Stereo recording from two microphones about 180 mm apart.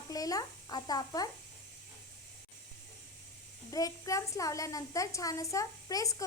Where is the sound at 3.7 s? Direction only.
20° left (ahead or behind).